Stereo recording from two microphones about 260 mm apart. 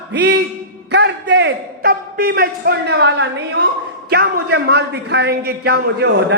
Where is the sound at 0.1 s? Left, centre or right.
Right.